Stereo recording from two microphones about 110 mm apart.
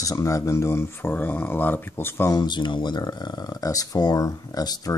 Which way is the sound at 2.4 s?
40° left (ahead or behind).